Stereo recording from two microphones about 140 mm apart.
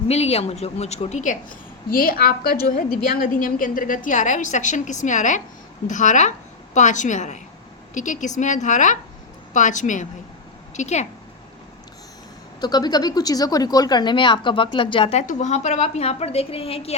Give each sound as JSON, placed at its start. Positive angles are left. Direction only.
{"t": 0.1, "sound": "a woman's voice", "side_deg": 45}
{"t": 1.2, "sound": "a woman's voice", "side_deg": 70}
{"t": 2.6, "sound": "a woman's voice", "side_deg": 70}
{"t": 12.5, "sound": "a woman's voice", "side_deg": 30}
{"t": 15.3, "sound": "a woman's voice", "side_deg": 60}